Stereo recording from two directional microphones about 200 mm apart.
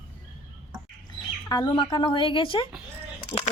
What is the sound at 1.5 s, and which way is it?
A woman's voice, 25° left (ahead or behind).